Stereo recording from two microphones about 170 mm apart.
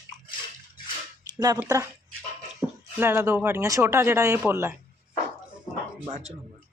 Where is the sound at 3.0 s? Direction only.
15° right (ahead or behind).